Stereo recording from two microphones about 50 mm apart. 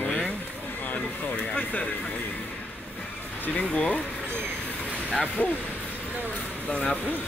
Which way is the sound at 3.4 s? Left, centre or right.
Left.